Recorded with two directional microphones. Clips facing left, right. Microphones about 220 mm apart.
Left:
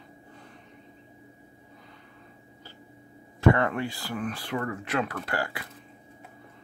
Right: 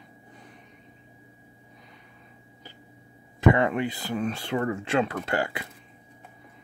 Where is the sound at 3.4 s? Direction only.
20° right (ahead or behind).